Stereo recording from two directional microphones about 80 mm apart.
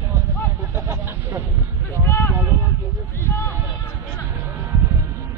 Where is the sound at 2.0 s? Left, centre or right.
Left.